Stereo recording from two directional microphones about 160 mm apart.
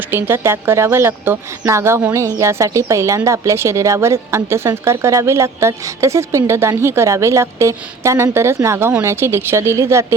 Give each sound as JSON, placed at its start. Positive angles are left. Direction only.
{"t": 0.1, "sound": "speech", "side_deg": -15}